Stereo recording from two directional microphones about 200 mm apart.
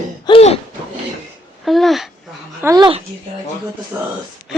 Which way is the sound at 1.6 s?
Centre (ahead or behind).